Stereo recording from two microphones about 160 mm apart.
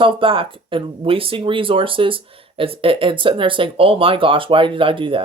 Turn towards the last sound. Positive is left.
turn(degrees=-35)  # may be behind; listen again after turning